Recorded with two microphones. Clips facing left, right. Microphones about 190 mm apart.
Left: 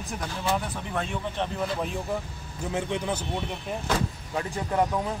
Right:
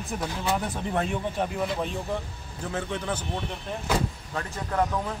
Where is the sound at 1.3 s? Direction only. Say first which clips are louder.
Right 1 dB; 10° right (ahead or behind).